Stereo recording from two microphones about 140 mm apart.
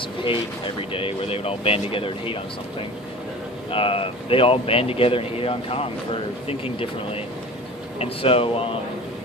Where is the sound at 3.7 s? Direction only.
40° left (ahead or behind).